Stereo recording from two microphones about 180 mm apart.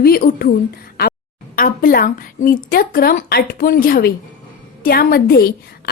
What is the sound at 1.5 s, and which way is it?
A woman's voice, 50° left (ahead or behind).